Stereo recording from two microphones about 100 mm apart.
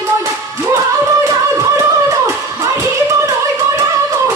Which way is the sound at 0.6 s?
35° right (ahead or behind).